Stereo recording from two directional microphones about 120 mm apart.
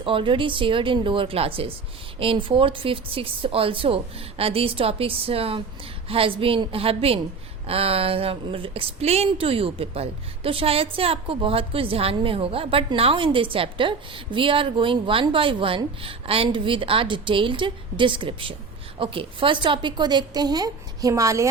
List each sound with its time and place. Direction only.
0.0 s a woman's voice: 45° right (ahead or behind); by 21.4 s 25° right (ahead or behind)